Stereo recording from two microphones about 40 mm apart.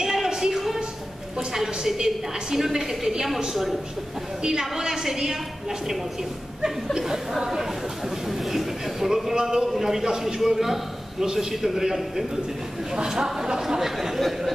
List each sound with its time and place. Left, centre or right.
0.0 s a sound: centre
1.5 s a woman's voice: centre
9.3 s a woman's voice: centre